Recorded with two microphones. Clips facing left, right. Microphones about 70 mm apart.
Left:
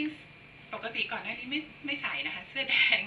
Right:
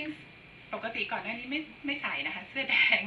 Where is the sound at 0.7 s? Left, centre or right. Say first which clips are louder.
Right 2 dB; centre.